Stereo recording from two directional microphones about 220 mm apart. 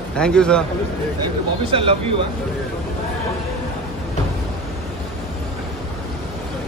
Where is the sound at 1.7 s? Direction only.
25° right (ahead or behind).